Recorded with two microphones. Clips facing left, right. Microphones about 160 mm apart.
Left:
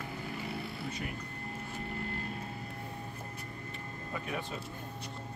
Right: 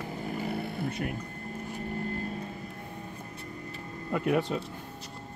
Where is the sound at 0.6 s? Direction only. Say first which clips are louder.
Right 6 dB; 55° right (ahead or behind).